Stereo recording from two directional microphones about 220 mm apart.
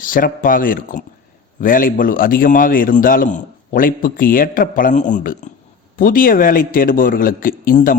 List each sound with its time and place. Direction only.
0.0 s a man's voice: 40° left (ahead or behind)